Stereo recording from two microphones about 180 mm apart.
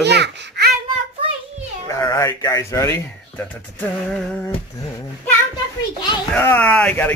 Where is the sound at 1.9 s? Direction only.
20° left (ahead or behind).